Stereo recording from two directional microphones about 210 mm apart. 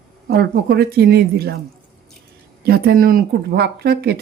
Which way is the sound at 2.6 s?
45° right (ahead or behind).